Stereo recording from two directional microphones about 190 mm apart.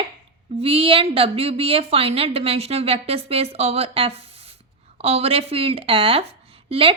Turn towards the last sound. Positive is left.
turn(degrees=-30)  # may be behind; listen again after turning